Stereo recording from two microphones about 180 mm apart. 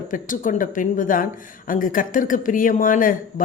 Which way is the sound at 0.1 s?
50° left (ahead or behind).